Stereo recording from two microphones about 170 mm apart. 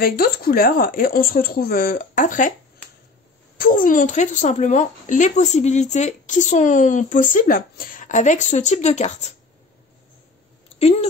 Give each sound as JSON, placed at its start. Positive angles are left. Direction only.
{"t": 0.0, "sound": "speech", "side_deg": 60}
{"t": 3.5, "sound": "a woman's voice", "side_deg": 55}
{"t": 10.8, "sound": "speech", "side_deg": 35}